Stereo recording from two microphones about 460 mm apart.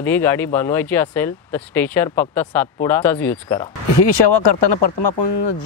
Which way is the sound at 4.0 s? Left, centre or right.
Left.